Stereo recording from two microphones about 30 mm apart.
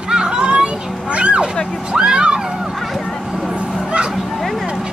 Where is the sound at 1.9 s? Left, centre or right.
Right.